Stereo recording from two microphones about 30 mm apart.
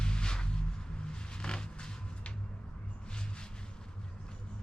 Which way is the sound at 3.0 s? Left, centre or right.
Left.